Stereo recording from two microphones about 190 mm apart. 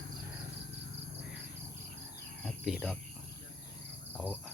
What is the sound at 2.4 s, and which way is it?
Cricket, centre (ahead or behind).